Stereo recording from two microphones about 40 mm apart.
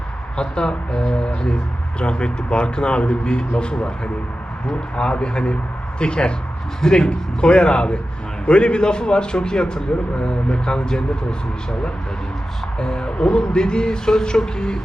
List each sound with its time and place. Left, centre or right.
0.3 s a man's voice: left
12.8 s a man's voice: left